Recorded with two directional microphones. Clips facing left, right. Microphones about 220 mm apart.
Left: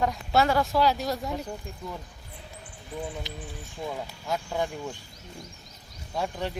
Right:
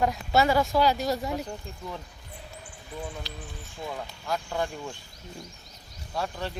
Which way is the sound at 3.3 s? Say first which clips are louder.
Left 2 dB; 20° left (ahead or behind).